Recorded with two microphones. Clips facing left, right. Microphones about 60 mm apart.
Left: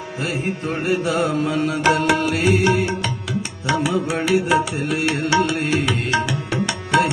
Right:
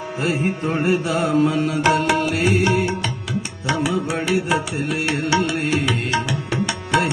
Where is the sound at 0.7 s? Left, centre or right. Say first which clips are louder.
Even; centre.